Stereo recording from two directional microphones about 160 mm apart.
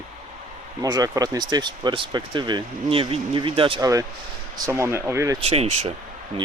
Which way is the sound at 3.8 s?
20° right (ahead or behind).